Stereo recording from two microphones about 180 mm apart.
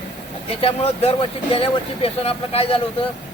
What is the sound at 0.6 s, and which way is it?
Speech, 30° left (ahead or behind).